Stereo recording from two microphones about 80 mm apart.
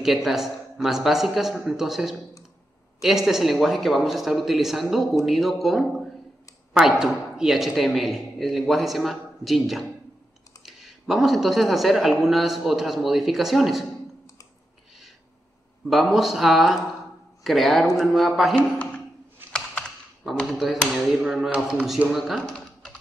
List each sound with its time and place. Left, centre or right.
0.0 s speech: centre
15.9 s speech: centre
18.6 s speech: centre
20.5 s speech: centre